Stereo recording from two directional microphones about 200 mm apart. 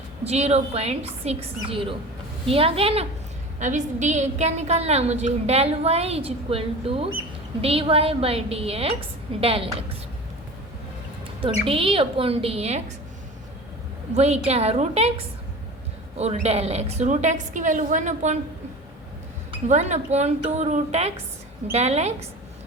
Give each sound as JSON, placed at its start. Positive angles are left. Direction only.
{"t": 0.3, "sound": "a woman's voice", "side_deg": -30}
{"t": 11.6, "sound": "a woman's voice", "side_deg": -30}
{"t": 14.2, "sound": "a woman's voice", "side_deg": -35}
{"t": 16.1, "sound": "a woman's voice", "side_deg": -30}
{"t": 19.5, "sound": "a woman's voice", "side_deg": -35}